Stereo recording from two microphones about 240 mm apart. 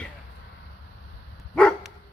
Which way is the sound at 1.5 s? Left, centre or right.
Centre.